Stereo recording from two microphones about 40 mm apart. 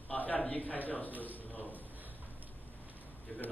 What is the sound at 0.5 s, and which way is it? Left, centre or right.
Speech, left.